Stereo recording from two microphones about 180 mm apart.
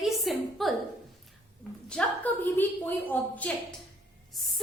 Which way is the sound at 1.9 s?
5° left (ahead or behind).